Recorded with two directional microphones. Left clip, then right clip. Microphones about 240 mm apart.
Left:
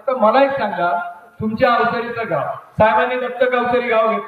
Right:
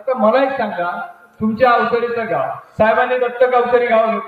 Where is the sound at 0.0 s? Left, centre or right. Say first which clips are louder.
Even; left.